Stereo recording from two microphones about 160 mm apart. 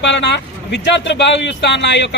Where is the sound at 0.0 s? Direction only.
90° left.